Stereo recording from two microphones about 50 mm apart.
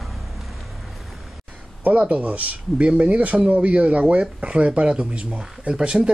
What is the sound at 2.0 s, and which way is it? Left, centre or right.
Speech, right.